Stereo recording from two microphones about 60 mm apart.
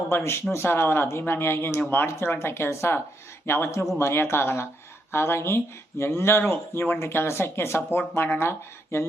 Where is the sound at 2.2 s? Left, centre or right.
Left.